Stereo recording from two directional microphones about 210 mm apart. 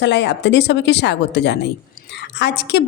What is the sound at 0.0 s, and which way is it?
A woman's voice, 55° left (ahead or behind).